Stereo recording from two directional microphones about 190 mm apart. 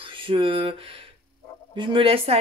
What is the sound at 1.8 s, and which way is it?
Speech, 30° right (ahead or behind).